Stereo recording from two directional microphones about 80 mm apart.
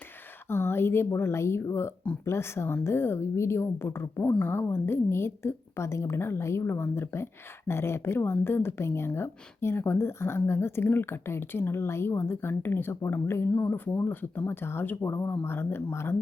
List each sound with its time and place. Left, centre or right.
0.4 s speech: left
4.2 s speech: left